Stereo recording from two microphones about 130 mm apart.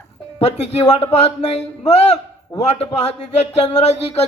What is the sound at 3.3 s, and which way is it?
Speech, 60° left (ahead or behind).